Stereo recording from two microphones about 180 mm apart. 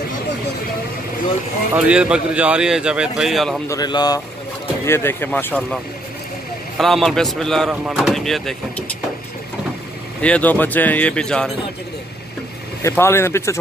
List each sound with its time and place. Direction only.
1.9 s speech: 5° right (ahead or behind)
3.6 s speech: 20° left (ahead or behind); by 5.8 s 5° left (ahead or behind)
6.8 s speech: centre (ahead or behind)
10.2 s speech: 10° left (ahead or behind)
12.8 s speech: 15° left (ahead or behind)